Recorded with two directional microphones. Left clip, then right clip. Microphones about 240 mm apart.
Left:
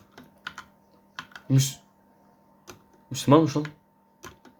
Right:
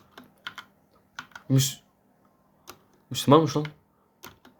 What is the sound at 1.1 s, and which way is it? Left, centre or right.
Computer keyboard, centre.